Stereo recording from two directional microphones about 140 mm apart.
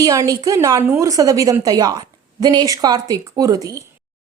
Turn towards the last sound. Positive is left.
turn(degrees=-25)  # may be behind; listen again after turning